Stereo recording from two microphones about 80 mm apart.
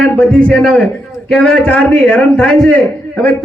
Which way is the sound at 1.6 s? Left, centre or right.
Centre.